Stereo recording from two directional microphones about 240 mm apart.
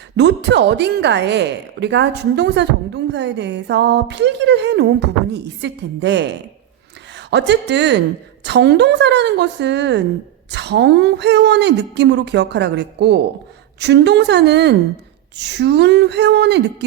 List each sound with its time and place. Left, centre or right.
0.2 s speech: right